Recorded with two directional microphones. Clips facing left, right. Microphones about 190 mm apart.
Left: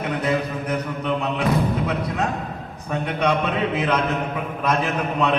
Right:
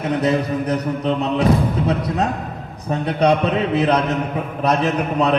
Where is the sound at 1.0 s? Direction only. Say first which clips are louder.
Right 5 dB; 35° right (ahead or behind).